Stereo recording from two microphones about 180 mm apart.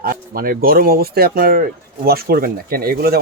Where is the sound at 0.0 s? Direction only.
55° right (ahead or behind).